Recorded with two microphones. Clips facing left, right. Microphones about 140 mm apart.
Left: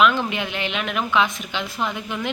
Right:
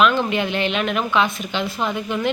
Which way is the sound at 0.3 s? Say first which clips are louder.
Right 5 dB; 10° left (ahead or behind).